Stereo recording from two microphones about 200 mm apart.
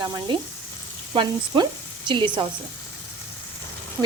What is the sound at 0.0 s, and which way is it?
Speech, 20° right (ahead or behind).